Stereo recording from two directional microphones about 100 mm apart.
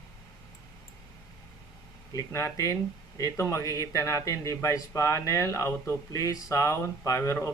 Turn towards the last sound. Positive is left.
turn(degrees=30)  # may be behind; listen again after turning